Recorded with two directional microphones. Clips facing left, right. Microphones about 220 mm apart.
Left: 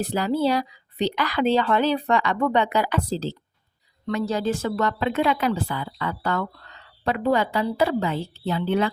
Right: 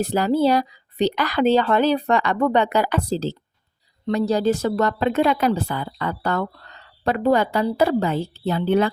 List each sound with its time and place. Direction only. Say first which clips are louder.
0.1 s speech: right 4 dB; 45° right (ahead or behind)